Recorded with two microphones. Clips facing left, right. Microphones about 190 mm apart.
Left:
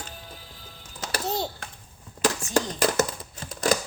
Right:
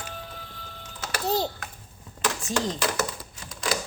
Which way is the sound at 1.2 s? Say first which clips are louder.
Right 4 dB; 35° right (ahead or behind).